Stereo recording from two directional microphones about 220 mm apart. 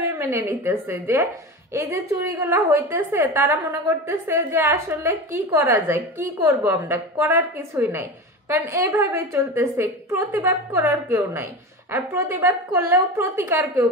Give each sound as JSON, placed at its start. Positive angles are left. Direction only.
{"t": 0.0, "sound": "a woman's voice", "side_deg": -10}